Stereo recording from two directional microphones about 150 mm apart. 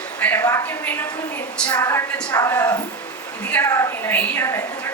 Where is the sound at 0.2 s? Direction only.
10° left (ahead or behind).